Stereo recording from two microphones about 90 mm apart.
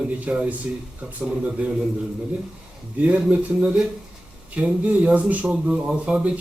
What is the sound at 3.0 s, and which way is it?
Speech, 15° right (ahead or behind).